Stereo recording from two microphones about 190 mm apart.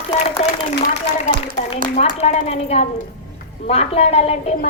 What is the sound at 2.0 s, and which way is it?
A woman's voice, 35° left (ahead or behind).